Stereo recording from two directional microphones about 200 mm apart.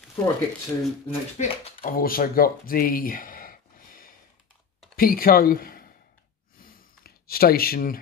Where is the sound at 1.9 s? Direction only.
45° left (ahead or behind).